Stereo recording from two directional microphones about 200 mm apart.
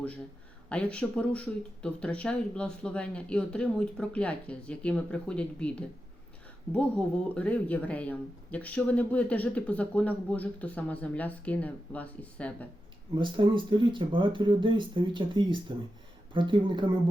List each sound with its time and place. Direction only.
0.7 s speech: 5° left (ahead or behind)
13.1 s speech: 25° right (ahead or behind)